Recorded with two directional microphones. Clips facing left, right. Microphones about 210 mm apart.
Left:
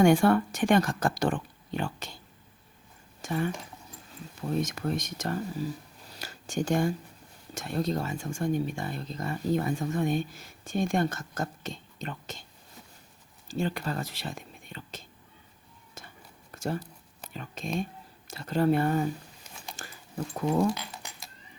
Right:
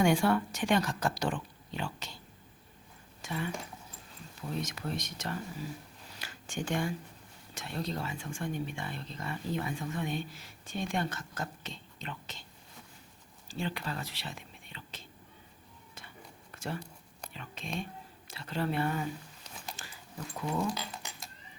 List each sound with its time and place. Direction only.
0.0 s speech: 50° left (ahead or behind)
3.2 s speech: 45° left (ahead or behind)
6.1 s a sound: 40° left (ahead or behind)
7.5 s speech: 45° left (ahead or behind)
13.5 s speech: 45° left (ahead or behind)
16.0 s a sound: 45° left (ahead or behind)
17.3 s speech: 45° left (ahead or behind)
19.8 s dog: 50° left (ahead or behind)
20.3 s speech: 45° left (ahead or behind)